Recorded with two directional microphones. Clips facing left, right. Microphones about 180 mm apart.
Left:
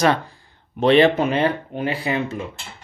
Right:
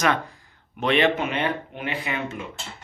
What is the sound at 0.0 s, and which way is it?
Speech, 30° left (ahead or behind).